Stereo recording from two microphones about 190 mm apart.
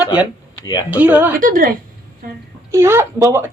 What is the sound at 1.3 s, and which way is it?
Speech, 45° right (ahead or behind).